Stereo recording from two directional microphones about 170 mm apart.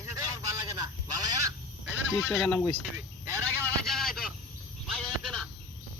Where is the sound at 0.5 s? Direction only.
20° right (ahead or behind).